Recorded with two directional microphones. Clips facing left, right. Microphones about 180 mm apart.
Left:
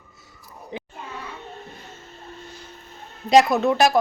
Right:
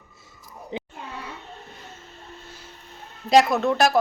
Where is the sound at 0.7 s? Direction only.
20° right (ahead or behind).